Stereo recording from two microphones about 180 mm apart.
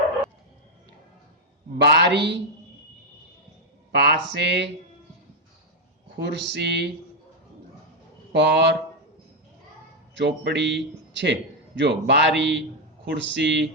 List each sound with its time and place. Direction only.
1.8 s speech: 65° right (ahead or behind)
3.9 s speech: 65° right (ahead or behind)
6.1 s speech: 65° right (ahead or behind)
8.3 s speech: 70° right (ahead or behind)
10.2 s a man's voice: 70° right (ahead or behind)